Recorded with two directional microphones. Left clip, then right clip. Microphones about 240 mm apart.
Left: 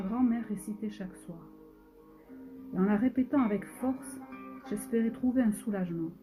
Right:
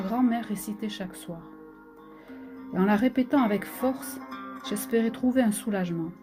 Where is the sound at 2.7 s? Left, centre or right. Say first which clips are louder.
Right 5 dB; right.